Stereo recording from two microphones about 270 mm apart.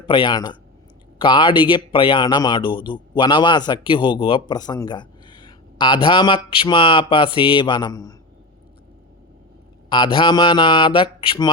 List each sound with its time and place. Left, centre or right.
0.1 s speech: centre
9.9 s speech: centre